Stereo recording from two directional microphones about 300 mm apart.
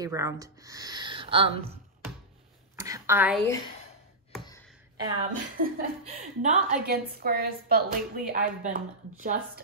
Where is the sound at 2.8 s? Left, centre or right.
Centre.